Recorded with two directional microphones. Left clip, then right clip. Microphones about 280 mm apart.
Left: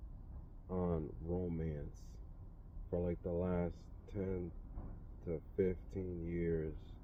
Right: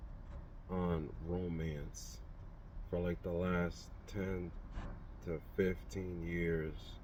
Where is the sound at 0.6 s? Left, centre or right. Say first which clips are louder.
Even; centre.